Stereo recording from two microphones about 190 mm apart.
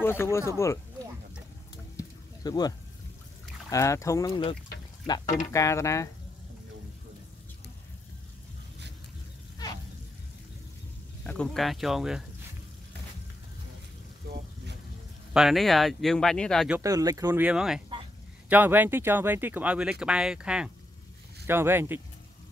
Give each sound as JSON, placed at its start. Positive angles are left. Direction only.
{"t": 0.0, "sound": "speech", "side_deg": 10}
{"t": 2.0, "sound": "a sound", "side_deg": 20}
{"t": 3.7, "sound": "speech", "side_deg": 15}
{"t": 11.2, "sound": "speech", "side_deg": 5}
{"t": 15.3, "sound": "speech", "side_deg": 0}
{"t": 16.7, "sound": "speech", "side_deg": -15}